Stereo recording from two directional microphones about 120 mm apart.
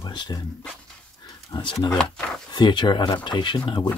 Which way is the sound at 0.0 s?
40° left (ahead or behind).